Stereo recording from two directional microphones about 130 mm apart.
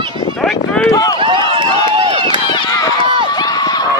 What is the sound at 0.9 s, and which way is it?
Run, 25° left (ahead or behind).